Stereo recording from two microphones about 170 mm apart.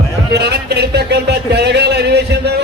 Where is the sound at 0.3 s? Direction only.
75° right (ahead or behind).